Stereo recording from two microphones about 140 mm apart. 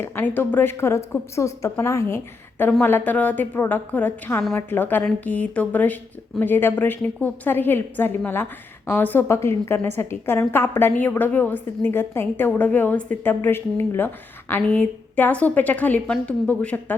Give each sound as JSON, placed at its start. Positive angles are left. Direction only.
{"t": 0.0, "sound": "a woman's voice", "side_deg": 15}